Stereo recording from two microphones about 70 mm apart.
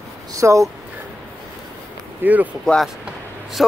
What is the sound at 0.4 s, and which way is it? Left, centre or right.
Speech, right.